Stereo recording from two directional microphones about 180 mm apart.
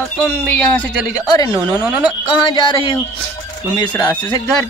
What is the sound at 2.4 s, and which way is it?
Speech, 25° left (ahead or behind).